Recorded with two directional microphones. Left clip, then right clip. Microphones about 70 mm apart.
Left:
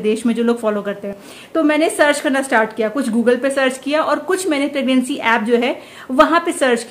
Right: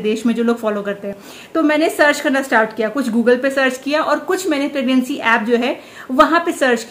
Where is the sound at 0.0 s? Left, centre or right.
Left.